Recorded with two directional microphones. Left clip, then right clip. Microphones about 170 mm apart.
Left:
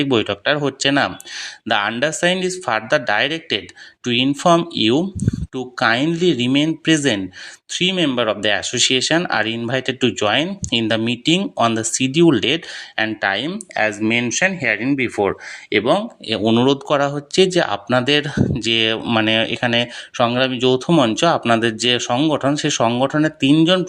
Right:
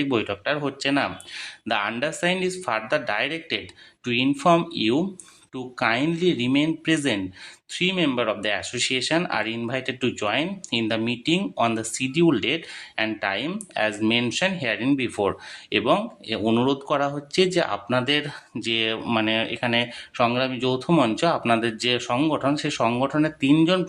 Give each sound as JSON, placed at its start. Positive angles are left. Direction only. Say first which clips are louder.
{"t": 0.0, "sound": "speech", "louder": "left 7 dB", "side_deg": 30}
{"t": 13.5, "sound": "speech", "louder": "left 5 dB", "side_deg": 15}